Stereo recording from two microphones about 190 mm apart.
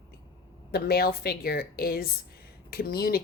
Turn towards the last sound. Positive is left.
turn(degrees=55)  # may be behind; listen again after turning